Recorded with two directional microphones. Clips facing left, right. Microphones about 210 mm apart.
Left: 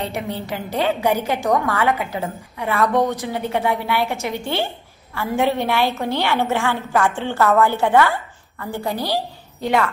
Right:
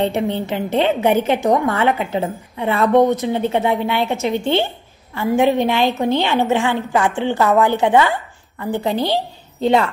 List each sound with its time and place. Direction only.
0.0 s a woman's voice: 25° right (ahead or behind)